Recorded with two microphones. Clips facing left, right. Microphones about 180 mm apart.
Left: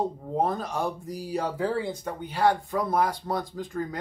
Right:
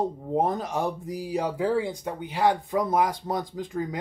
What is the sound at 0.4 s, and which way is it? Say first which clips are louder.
Speech: right 1 dB; 20° right (ahead or behind).